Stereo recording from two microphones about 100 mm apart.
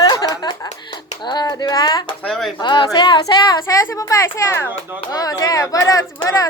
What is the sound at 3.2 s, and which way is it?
Speech, 35° left (ahead or behind).